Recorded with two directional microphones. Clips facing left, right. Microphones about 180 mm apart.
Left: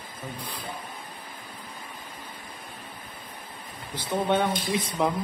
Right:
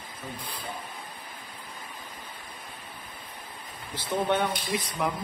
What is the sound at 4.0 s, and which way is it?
Speech, 15° left (ahead or behind).